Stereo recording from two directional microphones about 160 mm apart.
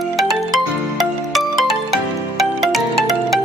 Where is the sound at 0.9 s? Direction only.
Centre (ahead or behind).